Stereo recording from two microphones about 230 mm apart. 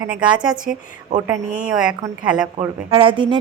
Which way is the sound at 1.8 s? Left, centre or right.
Centre.